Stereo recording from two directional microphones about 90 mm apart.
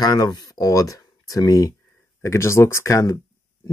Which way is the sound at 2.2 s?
30° left (ahead or behind).